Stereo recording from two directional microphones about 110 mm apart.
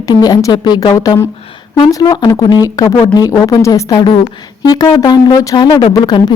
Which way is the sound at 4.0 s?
50° left (ahead or behind).